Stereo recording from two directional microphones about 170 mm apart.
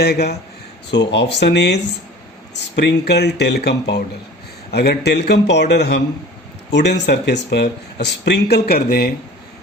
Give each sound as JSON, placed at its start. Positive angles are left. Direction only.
{"t": 0.0, "sound": "speech", "side_deg": 75}
{"t": 0.9, "sound": "speech", "side_deg": 90}